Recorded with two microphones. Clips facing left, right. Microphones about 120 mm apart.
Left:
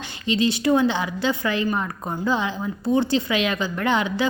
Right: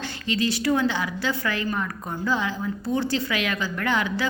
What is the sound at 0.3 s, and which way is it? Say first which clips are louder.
A woman's voice: left 4 dB; 20° left (ahead or behind).